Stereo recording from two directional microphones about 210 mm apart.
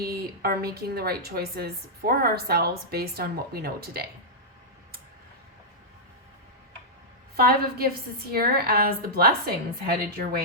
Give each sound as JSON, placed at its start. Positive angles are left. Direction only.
{"t": 0.0, "sound": "a woman's voice", "side_deg": -45}
{"t": 7.3, "sound": "a woman's voice", "side_deg": -45}